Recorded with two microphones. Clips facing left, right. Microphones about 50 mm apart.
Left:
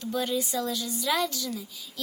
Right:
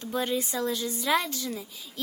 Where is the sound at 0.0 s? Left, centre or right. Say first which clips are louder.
Even; right.